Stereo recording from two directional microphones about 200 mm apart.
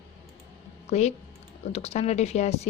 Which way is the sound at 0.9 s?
35° left (ahead or behind).